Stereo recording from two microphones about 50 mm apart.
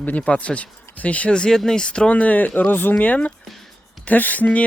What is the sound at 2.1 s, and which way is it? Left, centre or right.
Speech, left.